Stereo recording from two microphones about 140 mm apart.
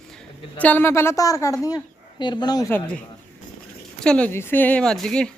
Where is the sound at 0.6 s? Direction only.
10° left (ahead or behind); by 2.7 s 30° left (ahead or behind).